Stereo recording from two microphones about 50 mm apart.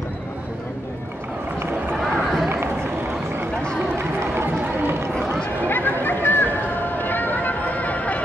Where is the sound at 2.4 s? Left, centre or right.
Right.